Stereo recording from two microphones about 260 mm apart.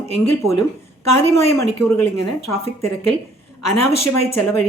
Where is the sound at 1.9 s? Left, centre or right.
Left.